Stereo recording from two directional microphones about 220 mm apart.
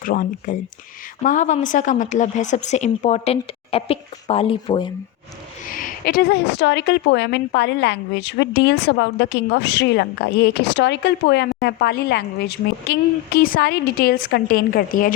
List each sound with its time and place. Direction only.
0.0 s a woman's voice: 40° left (ahead or behind); by 4.9 s 25° left (ahead or behind)
5.6 s a woman's voice: 40° left (ahead or behind)